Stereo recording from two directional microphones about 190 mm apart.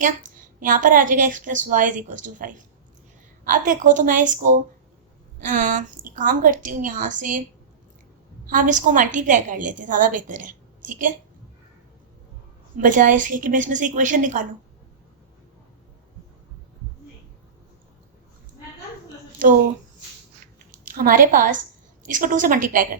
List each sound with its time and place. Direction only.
0.0 s a woman's voice: 45° right (ahead or behind)
8.4 s a woman's voice: 45° right (ahead or behind)
12.7 s a woman's voice: 45° right (ahead or behind)
20.7 s a woman's voice: 45° right (ahead or behind)